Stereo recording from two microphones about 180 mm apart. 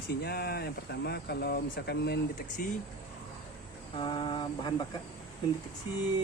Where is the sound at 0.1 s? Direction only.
60° left (ahead or behind).